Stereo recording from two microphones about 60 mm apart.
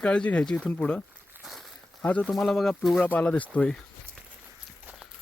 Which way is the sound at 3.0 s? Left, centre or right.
Left.